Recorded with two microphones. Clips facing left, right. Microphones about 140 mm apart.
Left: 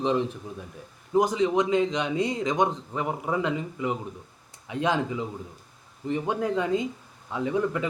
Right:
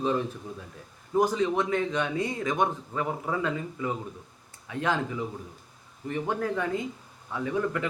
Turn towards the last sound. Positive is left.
turn(degrees=15)  # may be behind; listen again after turning